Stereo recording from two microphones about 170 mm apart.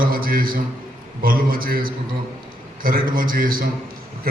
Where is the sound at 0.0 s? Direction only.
60° right (ahead or behind).